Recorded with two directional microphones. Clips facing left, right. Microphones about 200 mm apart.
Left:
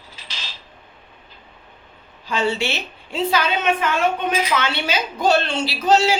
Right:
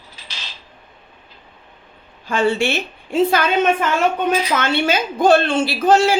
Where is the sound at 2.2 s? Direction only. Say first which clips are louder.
Right 4 dB; 50° right (ahead or behind).